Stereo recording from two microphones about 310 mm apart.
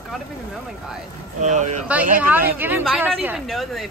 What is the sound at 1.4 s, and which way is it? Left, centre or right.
Speech, right.